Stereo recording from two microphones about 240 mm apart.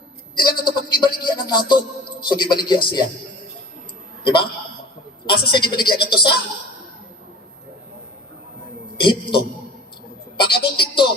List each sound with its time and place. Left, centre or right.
0.3 s a sound: centre
2.3 s speech: centre
5.3 s speech: centre
9.0 s a man's voice: centre